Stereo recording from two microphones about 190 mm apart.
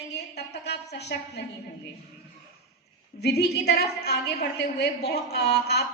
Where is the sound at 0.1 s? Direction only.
60° left (ahead or behind).